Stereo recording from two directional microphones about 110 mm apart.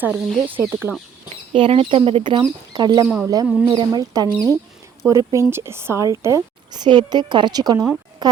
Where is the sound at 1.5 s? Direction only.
55° right (ahead or behind).